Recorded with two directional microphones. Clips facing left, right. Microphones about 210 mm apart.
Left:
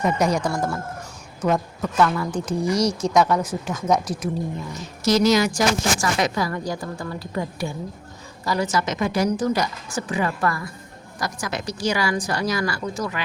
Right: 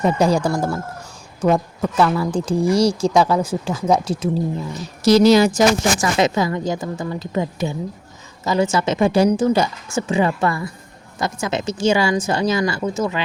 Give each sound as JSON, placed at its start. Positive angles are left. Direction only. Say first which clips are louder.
{"t": 0.0, "sound": "speech", "louder": "right 4 dB", "side_deg": -30}
{"t": 2.0, "sound": "speech", "louder": "right 3 dB", "side_deg": -30}